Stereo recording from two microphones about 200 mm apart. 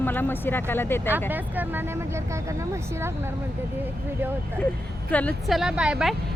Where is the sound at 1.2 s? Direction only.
10° right (ahead or behind).